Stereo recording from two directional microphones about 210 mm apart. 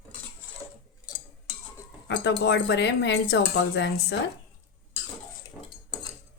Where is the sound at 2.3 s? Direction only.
55° left (ahead or behind).